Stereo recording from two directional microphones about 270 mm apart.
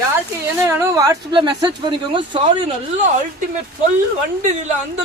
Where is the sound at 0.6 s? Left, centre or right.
Centre.